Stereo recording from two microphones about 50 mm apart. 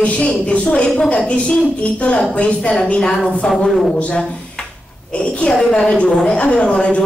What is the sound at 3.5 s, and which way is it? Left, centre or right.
Speech, centre.